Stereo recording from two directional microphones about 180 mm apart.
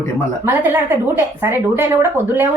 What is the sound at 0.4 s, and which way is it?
A woman's voice, 10° right (ahead or behind).